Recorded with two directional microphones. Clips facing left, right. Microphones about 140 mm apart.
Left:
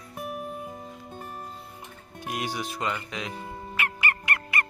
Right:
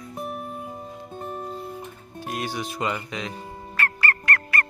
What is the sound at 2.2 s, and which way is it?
Music, 15° left (ahead or behind).